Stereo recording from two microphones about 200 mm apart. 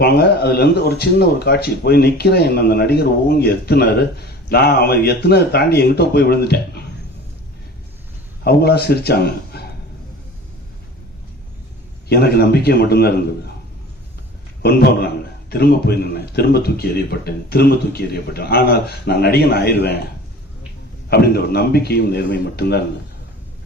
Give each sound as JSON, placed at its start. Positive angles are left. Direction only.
{"t": 0.0, "sound": "speech", "side_deg": 55}
{"t": 8.4, "sound": "speech", "side_deg": 50}
{"t": 12.0, "sound": "speech", "side_deg": 50}
{"t": 14.6, "sound": "speech", "side_deg": 55}
{"t": 21.1, "sound": "speech", "side_deg": 50}